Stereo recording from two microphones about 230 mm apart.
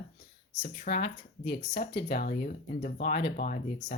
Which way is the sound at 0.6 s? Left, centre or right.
Left.